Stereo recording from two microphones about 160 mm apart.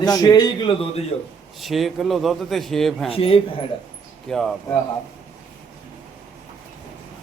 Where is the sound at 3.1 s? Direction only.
35° left (ahead or behind).